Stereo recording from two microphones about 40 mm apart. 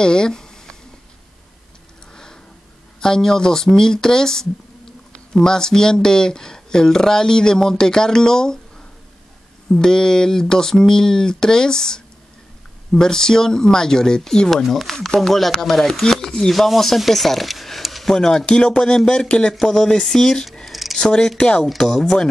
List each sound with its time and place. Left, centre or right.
0.0 s a sound: centre
3.0 s speech: centre
9.7 s speech: centre
14.5 s speech: centre
18.0 s speech: centre
18.4 s speech: left
19.6 s speech: centre
20.6 s a sound: centre
21.0 s speech: centre
21.7 s speech: centre